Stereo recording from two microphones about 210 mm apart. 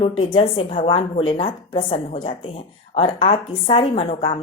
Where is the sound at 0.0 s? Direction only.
25° left (ahead or behind).